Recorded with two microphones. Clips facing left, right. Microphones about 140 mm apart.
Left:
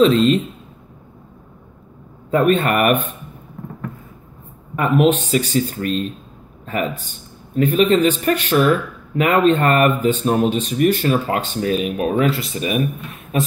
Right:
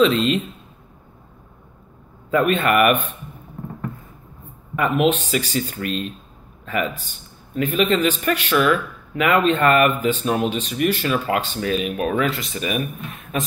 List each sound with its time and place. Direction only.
0.0 s speech: 40° left (ahead or behind)
2.3 s speech: 40° left (ahead or behind)
4.7 s a man's voice: 40° left (ahead or behind)